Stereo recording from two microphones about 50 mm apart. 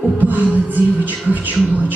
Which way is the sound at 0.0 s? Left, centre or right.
Right.